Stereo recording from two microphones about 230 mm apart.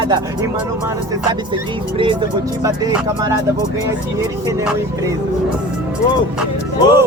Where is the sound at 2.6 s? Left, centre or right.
Centre.